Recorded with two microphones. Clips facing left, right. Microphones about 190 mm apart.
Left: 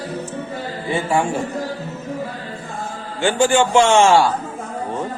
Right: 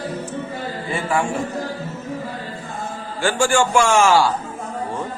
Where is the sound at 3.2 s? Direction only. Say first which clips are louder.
Left 2 dB; 20° left (ahead or behind).